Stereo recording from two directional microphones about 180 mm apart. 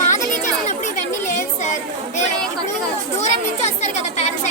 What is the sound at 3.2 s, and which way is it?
Speech, 40° left (ahead or behind).